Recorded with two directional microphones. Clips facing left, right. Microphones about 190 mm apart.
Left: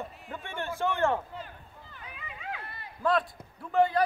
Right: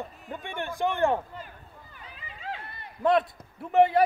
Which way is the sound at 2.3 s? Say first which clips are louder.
Right 2 dB; 30° right (ahead or behind).